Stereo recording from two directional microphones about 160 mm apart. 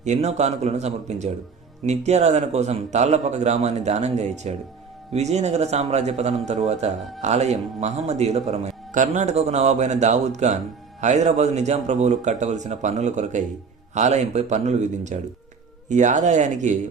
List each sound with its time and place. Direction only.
0.0 s a man's voice: 45° right (ahead or behind)